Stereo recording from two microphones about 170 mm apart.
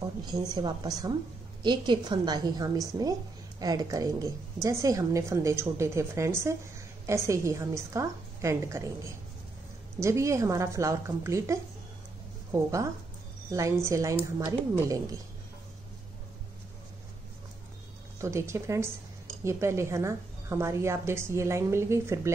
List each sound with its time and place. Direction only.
0.2 s a woman's voice: 25° right (ahead or behind)
9.9 s a woman's voice: 15° right (ahead or behind)
18.2 s a woman's voice: 15° right (ahead or behind)